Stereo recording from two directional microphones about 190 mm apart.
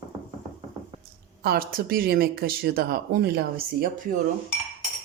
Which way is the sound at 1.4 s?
55° right (ahead or behind).